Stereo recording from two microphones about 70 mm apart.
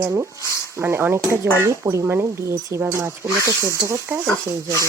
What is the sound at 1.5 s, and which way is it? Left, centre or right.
Speech, right.